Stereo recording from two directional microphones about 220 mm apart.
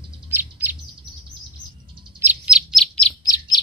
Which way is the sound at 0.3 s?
10° right (ahead or behind).